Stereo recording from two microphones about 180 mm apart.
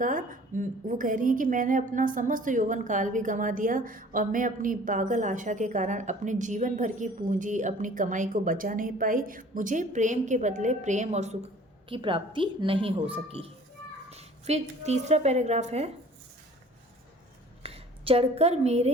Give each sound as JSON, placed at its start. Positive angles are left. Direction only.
{"t": 0.0, "sound": "a woman's voice", "side_deg": -45}
{"t": 11.9, "sound": "a woman's voice", "side_deg": -30}
{"t": 17.6, "sound": "speech", "side_deg": -30}